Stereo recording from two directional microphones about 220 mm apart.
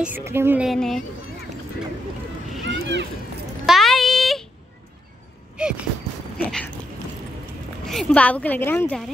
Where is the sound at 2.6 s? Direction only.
55° right (ahead or behind).